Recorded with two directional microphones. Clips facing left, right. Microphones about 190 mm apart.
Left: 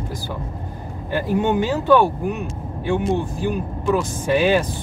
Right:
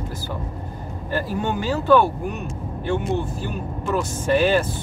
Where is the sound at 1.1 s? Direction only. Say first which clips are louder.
Left 5 dB; 20° left (ahead or behind).